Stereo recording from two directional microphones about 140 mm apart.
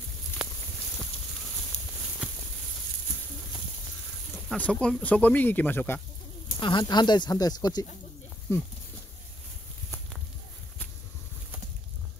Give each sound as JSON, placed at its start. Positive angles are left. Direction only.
{"t": 2.2, "sound": "a sound", "side_deg": -5}
{"t": 4.5, "sound": "speech", "side_deg": 10}
{"t": 6.6, "sound": "speech", "side_deg": 35}